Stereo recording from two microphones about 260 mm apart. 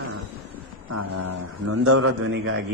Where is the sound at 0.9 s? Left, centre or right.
Right.